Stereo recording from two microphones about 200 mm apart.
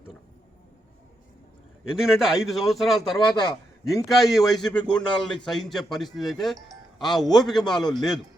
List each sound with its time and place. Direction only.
1.9 s speech: centre (ahead or behind)
3.3 s a man's voice: 25° left (ahead or behind)
4.1 s speech: centre (ahead or behind)
4.8 s a man's voice: 20° left (ahead or behind)
5.2 s speech: centre (ahead or behind)